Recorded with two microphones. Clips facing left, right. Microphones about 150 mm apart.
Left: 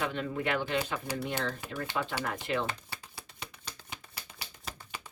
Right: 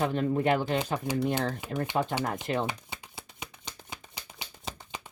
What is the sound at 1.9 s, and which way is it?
Speech, 45° right (ahead or behind).